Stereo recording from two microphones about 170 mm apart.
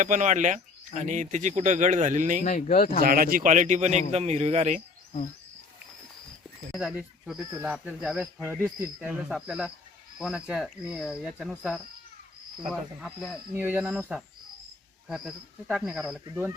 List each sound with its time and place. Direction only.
0.0 s speech: 45° right (ahead or behind)
2.4 s speech: 45° left (ahead or behind)
3.0 s speech: 60° right (ahead or behind); by 4.8 s 40° right (ahead or behind)
6.7 s speech: 5° right (ahead or behind)